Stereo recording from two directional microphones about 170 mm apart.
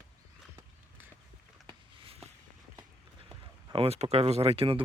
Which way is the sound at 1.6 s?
30° right (ahead or behind).